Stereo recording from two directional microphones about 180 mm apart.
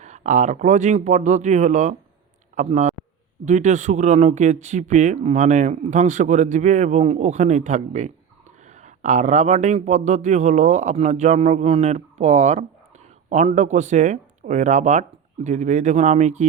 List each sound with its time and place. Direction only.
0.0 s speech: 40° right (ahead or behind)